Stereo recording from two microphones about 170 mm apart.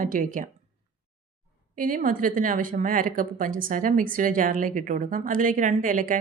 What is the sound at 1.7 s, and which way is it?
Speech, 55° right (ahead or behind).